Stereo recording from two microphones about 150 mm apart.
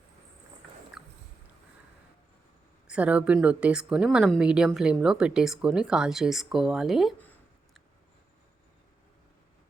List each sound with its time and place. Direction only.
2.8 s a woman's voice: 10° right (ahead or behind)